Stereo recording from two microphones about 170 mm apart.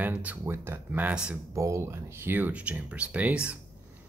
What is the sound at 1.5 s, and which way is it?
Speech, 15° right (ahead or behind).